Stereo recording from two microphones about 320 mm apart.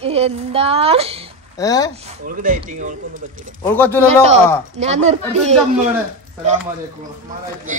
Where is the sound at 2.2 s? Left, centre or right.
Right.